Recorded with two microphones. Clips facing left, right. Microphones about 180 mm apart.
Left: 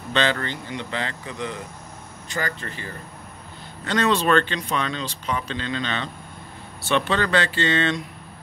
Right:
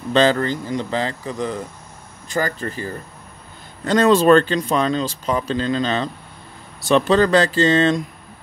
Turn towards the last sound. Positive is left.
turn(degrees=-40)  # may be behind; listen again after turning